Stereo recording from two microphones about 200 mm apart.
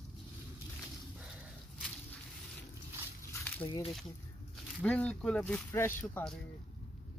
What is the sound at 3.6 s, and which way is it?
Speech, 25° left (ahead or behind).